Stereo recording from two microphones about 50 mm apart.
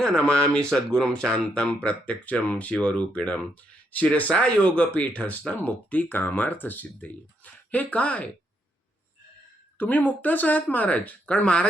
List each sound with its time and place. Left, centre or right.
0.0 s speech: centre
1.9 s speech: left
9.7 s speech: left